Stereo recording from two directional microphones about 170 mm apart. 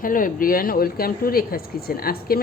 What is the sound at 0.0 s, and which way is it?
Speech, 55° left (ahead or behind).